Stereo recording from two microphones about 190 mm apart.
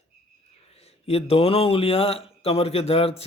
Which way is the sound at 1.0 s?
30° left (ahead or behind).